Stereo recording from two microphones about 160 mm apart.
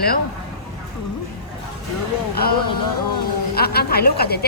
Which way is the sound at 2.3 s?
75° left (ahead or behind).